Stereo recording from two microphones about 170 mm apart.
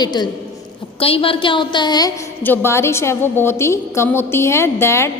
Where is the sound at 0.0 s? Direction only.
25° left (ahead or behind).